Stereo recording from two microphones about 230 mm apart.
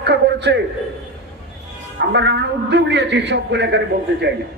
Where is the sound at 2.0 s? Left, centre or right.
Right.